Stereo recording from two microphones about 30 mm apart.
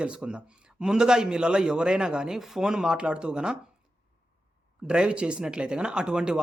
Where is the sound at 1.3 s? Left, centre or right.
Right.